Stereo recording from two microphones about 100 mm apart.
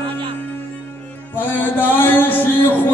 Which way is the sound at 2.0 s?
20° left (ahead or behind).